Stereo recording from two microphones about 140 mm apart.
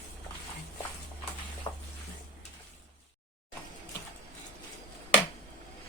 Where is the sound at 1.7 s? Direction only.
35° left (ahead or behind).